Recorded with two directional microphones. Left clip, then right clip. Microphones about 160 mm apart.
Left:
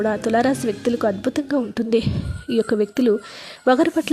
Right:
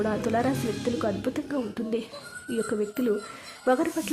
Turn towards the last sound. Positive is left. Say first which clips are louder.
# left 8 dB
turn(degrees=35)  # may be behind; listen again after turning